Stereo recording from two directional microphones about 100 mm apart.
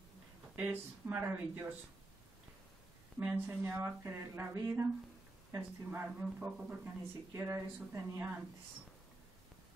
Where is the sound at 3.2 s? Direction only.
20° right (ahead or behind).